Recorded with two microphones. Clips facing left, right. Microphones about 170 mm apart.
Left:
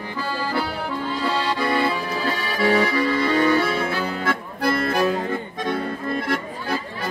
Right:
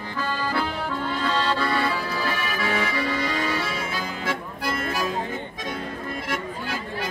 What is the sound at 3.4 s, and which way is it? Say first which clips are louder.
Accordion: left 8 dB; 60° left (ahead or behind).